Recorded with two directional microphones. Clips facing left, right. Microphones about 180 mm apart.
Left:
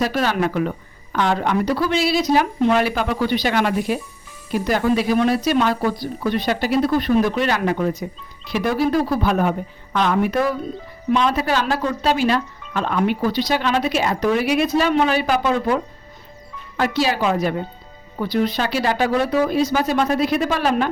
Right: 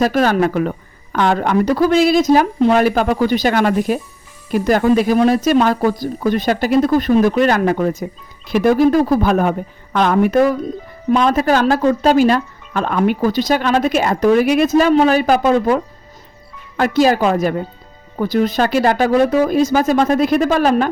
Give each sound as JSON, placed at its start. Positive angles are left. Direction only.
{"t": 0.0, "sound": "speech", "side_deg": -45}